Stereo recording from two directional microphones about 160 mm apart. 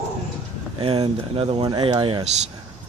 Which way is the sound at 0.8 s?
35° right (ahead or behind).